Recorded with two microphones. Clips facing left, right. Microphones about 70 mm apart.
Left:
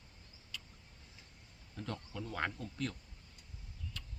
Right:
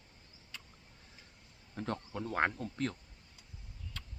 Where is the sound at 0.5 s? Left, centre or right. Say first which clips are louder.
Left 1 dB; right.